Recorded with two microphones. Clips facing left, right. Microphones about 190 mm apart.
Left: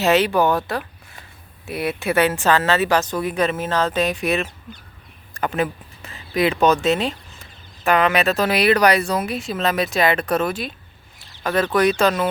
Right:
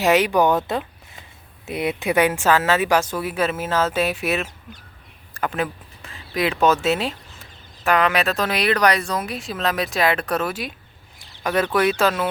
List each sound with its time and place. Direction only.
0.0 s a woman's voice: 15° right (ahead or behind)